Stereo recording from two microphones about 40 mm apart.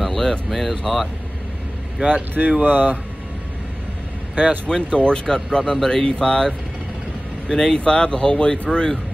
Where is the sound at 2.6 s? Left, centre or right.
Right.